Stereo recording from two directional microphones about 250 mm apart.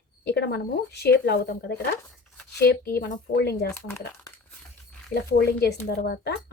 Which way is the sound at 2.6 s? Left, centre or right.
Left.